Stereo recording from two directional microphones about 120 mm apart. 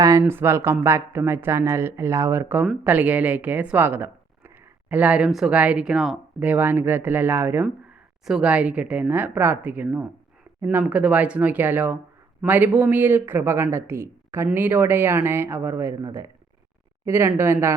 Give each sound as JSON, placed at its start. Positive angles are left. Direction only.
{"t": 0.0, "sound": "a man's voice", "side_deg": -25}
{"t": 6.4, "sound": "speech", "side_deg": -15}
{"t": 8.2, "sound": "a man's voice", "side_deg": -5}